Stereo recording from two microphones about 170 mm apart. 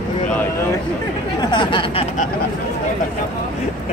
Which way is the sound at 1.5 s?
30° left (ahead or behind).